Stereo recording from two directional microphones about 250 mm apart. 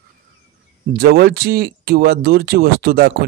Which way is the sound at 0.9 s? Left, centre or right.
Right.